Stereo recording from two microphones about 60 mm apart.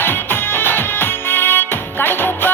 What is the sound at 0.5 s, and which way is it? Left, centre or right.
Music, left.